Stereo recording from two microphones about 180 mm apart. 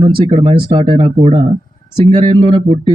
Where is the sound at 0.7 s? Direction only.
25° right (ahead or behind).